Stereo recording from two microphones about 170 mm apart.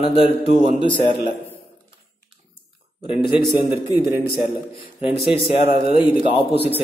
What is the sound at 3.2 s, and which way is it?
Speech, 30° left (ahead or behind).